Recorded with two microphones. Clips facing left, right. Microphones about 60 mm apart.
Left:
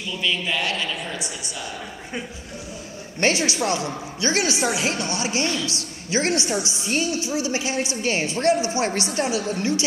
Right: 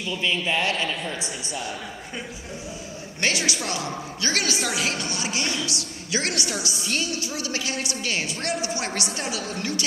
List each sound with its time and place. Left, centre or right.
0.2 s a woman's voice: right
3.2 s a woman's voice: left